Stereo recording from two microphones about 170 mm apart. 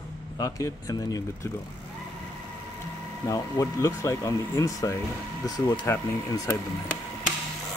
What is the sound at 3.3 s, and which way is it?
Speech, 20° left (ahead or behind).